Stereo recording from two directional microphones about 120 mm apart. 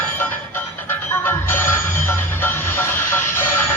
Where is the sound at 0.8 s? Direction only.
20° left (ahead or behind).